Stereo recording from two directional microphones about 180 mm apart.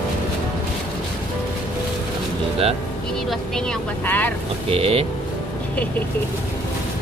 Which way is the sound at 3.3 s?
5° left (ahead or behind).